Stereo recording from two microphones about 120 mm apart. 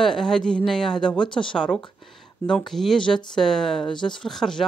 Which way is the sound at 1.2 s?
45° left (ahead or behind).